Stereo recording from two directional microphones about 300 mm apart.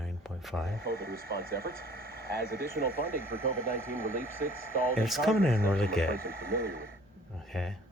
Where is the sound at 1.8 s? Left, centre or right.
Right.